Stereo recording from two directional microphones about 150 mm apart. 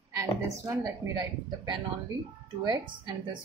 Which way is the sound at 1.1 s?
30° right (ahead or behind).